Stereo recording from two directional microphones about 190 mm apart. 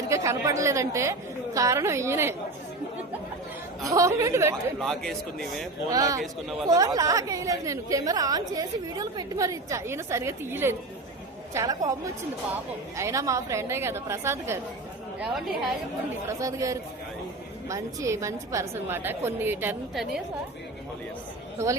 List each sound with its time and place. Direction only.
0.1 s a woman's voice: 15° right (ahead or behind)
3.8 s a woman's voice: 15° right (ahead or behind)
4.8 s a man's voice: centre (ahead or behind)
5.9 s a woman's voice: 20° right (ahead or behind)
16.2 s a woman's voice: 15° right (ahead or behind)